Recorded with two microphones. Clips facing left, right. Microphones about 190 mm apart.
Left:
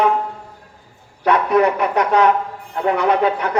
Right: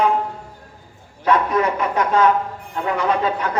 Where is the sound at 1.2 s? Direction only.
65° left (ahead or behind).